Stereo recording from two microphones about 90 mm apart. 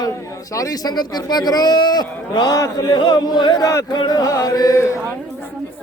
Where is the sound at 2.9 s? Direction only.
55° left (ahead or behind).